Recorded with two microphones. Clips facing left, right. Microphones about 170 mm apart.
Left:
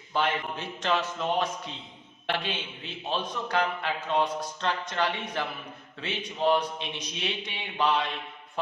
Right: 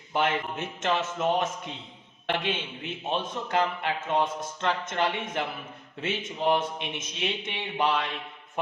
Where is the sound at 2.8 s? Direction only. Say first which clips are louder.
Even; 20° right (ahead or behind).